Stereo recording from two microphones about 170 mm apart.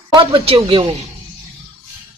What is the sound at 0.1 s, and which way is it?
Speech, 30° right (ahead or behind).